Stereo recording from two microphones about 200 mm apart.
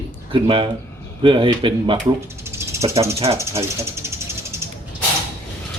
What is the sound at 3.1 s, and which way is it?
Speech, 30° right (ahead or behind).